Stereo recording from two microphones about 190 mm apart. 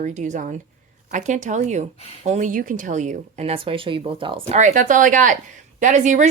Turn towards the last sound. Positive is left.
turn(degrees=-40)  # may be behind; listen again after turning